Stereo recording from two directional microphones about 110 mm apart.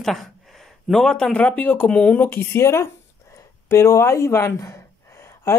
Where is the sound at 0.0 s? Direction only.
Centre (ahead or behind).